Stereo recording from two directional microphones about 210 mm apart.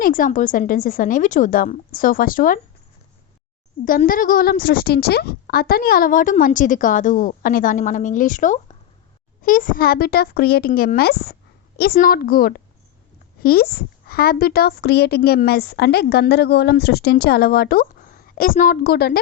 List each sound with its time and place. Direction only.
0.0 s a woman's voice: 40° left (ahead or behind)
3.8 s a woman's voice: 40° left (ahead or behind)